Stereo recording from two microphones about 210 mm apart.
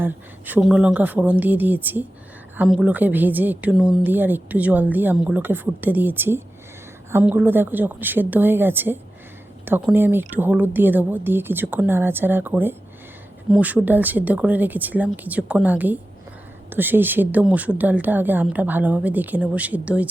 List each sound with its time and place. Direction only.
0.0 s a woman's voice: 10° right (ahead or behind)